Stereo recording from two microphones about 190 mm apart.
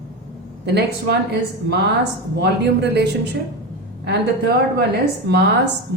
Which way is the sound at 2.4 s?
60° right (ahead or behind).